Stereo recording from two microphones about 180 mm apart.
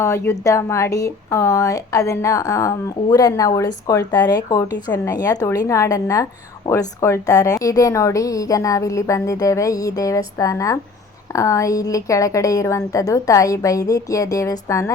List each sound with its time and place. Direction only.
0.0 s a woman's voice: 15° left (ahead or behind)